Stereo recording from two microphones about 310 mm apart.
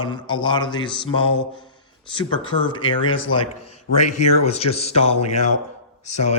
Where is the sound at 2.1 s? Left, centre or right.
Centre.